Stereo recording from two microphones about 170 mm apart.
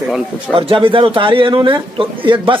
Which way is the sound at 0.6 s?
30° right (ahead or behind).